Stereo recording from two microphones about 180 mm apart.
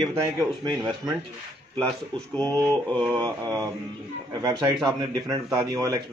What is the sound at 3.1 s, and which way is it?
A man's voice, 20° right (ahead or behind).